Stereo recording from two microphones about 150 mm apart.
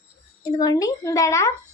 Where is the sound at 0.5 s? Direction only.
25° left (ahead or behind).